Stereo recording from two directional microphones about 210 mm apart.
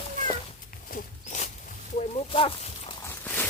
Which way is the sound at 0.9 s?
35° left (ahead or behind).